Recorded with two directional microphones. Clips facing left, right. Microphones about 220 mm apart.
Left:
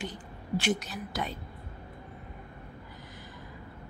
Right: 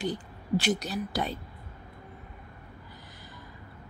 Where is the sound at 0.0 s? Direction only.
35° right (ahead or behind).